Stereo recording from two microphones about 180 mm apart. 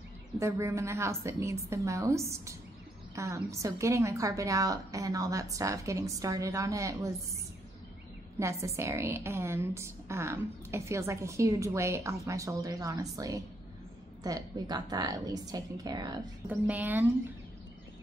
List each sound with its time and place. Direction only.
0.4 s a woman's voice: 15° right (ahead or behind)
8.4 s a woman's voice: 15° right (ahead or behind)
16.4 s a woman's voice: 10° right (ahead or behind)